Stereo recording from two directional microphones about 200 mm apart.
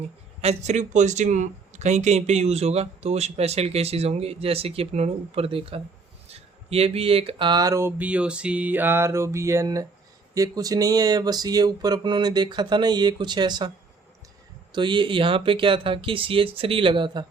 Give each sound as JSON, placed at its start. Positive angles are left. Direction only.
{"t": 0.4, "sound": "speech", "side_deg": -35}
{"t": 14.7, "sound": "speech", "side_deg": -25}